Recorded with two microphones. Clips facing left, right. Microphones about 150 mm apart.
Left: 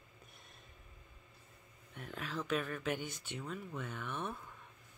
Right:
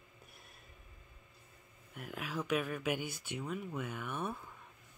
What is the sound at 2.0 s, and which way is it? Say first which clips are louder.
Speech: right 2 dB; 10° right (ahead or behind).